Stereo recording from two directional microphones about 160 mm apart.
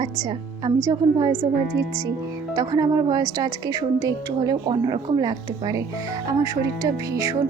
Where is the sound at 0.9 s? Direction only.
15° right (ahead or behind).